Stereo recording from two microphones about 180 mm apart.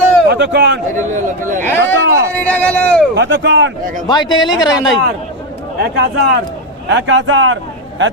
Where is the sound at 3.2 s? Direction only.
80° right.